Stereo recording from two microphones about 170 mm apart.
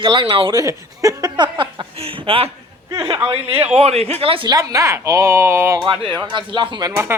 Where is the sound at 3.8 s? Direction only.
35° right (ahead or behind); by 5.8 s 15° right (ahead or behind).